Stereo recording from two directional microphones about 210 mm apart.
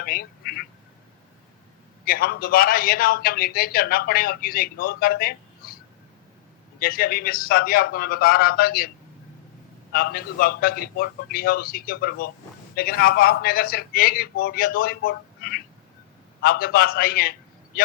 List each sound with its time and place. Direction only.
0.0 s quack: 45° left (ahead or behind)
2.0 s a man's voice: 45° left (ahead or behind)
9.9 s a man's voice: 45° left (ahead or behind)